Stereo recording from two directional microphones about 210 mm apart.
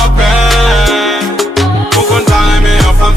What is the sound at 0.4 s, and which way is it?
Music, centre (ahead or behind).